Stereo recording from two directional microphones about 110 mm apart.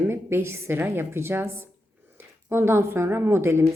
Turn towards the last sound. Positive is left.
turn(degrees=-20)  # may be behind; listen again after turning